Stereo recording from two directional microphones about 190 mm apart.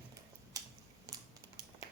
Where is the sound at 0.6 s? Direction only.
20° right (ahead or behind).